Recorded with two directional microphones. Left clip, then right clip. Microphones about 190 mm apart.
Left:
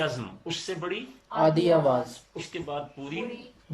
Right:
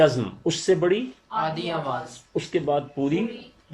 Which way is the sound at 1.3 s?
35° left (ahead or behind).